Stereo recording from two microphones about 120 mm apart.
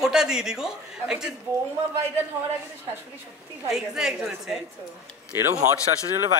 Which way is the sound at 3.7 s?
5° right (ahead or behind).